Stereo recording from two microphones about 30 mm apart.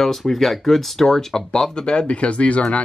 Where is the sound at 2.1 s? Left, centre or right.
Left.